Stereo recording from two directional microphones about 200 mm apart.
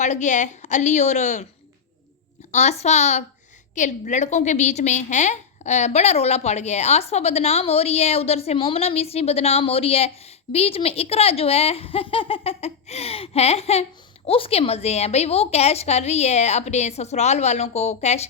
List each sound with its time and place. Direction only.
0.0 s a woman's voice: 35° left (ahead or behind)
2.5 s a woman's voice: 35° left (ahead or behind)